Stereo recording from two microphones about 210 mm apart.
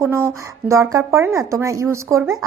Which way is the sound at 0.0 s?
10° right (ahead or behind).